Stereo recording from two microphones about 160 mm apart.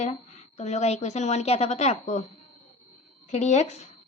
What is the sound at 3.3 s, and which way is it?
Speech, 45° left (ahead or behind).